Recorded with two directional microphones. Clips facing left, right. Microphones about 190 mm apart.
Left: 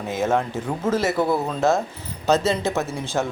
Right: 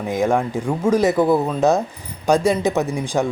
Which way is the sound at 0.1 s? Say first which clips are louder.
Right 3 dB; 15° right (ahead or behind).